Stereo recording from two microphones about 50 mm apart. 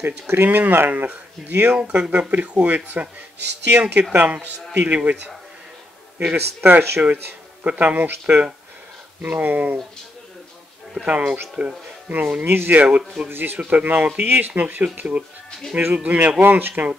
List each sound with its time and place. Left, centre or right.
0.0 s speech: right
6.3 s speech: right
9.2 s speech: right
11.0 s speech: right
12.4 s speech: right
13.6 s speech: right